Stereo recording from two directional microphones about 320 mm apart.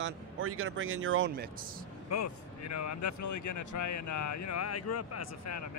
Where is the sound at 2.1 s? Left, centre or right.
Left.